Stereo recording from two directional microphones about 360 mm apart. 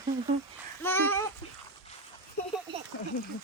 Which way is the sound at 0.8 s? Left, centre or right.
Centre.